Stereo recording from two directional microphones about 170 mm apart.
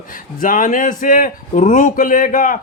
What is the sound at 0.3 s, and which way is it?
A man's voice, 55° left (ahead or behind).